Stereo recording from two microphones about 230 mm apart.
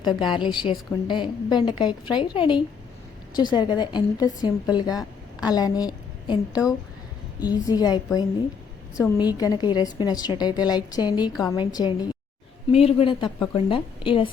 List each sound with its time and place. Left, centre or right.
0.0 s a woman's voice: centre